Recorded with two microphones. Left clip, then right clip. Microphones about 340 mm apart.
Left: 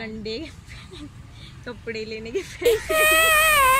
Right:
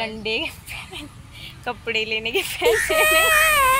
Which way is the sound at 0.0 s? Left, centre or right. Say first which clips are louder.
Right 7 dB; centre.